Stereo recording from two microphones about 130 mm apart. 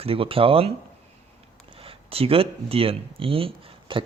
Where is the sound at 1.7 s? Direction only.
45° right (ahead or behind).